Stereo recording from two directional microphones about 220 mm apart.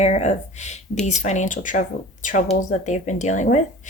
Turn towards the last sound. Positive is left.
turn(degrees=35)  # may be behind; listen again after turning